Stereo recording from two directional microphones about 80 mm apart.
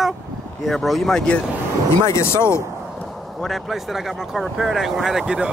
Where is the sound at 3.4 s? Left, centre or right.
Centre.